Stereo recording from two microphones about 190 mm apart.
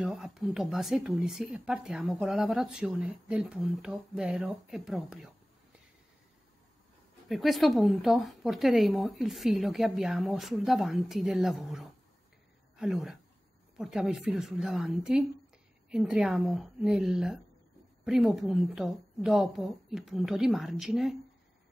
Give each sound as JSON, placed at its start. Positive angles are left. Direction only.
{"t": 0.0, "sound": "speech", "side_deg": -5}
{"t": 7.2, "sound": "a woman's voice", "side_deg": 0}